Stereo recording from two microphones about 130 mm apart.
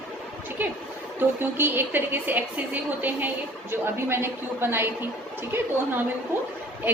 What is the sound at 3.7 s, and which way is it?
A woman's voice, 20° right (ahead or behind).